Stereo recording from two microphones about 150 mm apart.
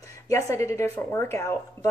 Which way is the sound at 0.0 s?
20° left (ahead or behind).